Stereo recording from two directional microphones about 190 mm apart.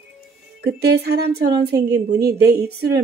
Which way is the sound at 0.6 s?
55° right (ahead or behind).